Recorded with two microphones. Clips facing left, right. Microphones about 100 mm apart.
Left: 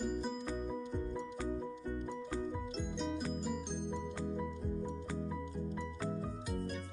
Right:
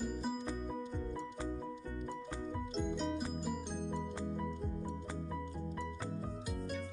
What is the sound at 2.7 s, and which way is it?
Music, centre (ahead or behind).